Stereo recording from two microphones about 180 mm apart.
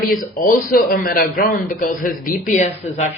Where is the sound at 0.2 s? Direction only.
50° left (ahead or behind).